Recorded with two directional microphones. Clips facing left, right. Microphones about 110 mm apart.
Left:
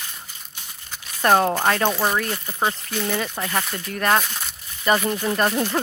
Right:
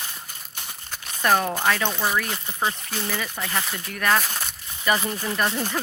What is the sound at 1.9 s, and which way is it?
Speech, 25° left (ahead or behind).